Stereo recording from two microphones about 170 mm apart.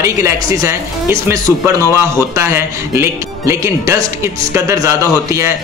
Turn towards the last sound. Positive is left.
turn(degrees=-15)  # may be behind; listen again after turning